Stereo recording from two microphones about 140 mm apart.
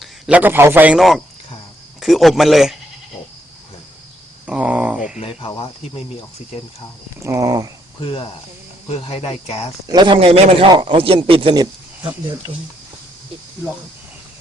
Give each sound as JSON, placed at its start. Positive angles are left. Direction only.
{"t": 0.0, "sound": "a man's voice", "side_deg": -10}
{"t": 0.9, "sound": "speech", "side_deg": 0}
{"t": 4.4, "sound": "speech", "side_deg": -5}
{"t": 5.4, "sound": "speech", "side_deg": 40}
{"t": 7.2, "sound": "a sound", "side_deg": -20}
{"t": 8.0, "sound": "speech", "side_deg": 40}
{"t": 9.8, "sound": "a man's voice", "side_deg": -30}